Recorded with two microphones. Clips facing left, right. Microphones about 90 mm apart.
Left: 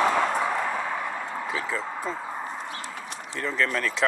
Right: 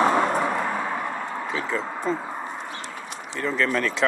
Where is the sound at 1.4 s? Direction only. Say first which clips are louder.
Right 3 dB; centre (ahead or behind).